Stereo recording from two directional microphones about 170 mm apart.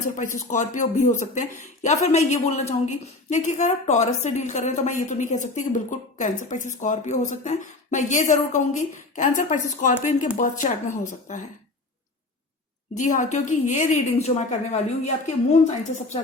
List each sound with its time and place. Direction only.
0.2 s a woman's voice: 50° left (ahead or behind)
13.0 s a woman's voice: 45° left (ahead or behind)